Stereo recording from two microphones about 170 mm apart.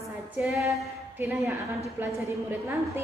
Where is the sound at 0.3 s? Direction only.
10° right (ahead or behind).